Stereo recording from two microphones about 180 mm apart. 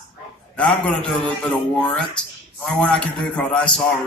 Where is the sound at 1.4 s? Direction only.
5° left (ahead or behind).